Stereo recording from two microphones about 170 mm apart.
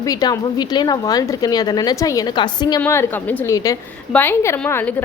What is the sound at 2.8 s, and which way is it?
A woman's voice, 10° left (ahead or behind).